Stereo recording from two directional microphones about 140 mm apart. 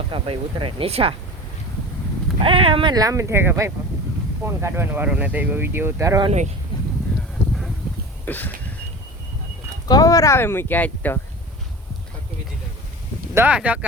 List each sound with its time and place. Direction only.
0.1 s speech: 40° right (ahead or behind)
2.4 s speech: 40° right (ahead or behind)
2.9 s speech: 25° right (ahead or behind)
6.7 s a sound: 35° left (ahead or behind)
8.2 s a sound: 15° left (ahead or behind)
9.9 s speech: 25° left (ahead or behind)
13.3 s speech: 10° right (ahead or behind)